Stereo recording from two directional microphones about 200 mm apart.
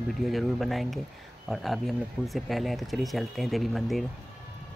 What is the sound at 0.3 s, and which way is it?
Speech, centre (ahead or behind).